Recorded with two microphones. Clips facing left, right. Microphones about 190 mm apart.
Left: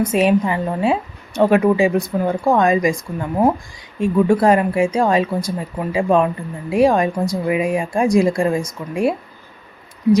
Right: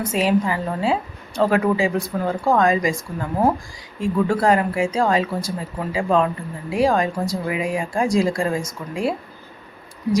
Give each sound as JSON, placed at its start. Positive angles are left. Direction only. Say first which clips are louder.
{"t": 0.0, "sound": "a woman's voice", "louder": "left 4 dB", "side_deg": 20}